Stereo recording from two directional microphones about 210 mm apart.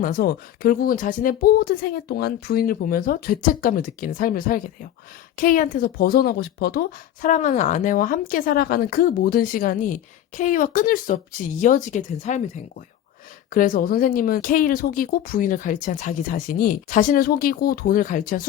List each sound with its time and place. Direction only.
0.0 s speech: 45° left (ahead or behind)
13.5 s speech: 40° left (ahead or behind)